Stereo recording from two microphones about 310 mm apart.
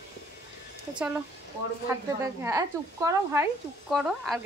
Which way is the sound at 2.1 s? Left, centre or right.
Centre.